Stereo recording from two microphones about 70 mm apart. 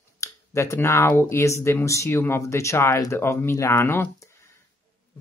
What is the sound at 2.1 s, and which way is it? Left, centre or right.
Speech, left.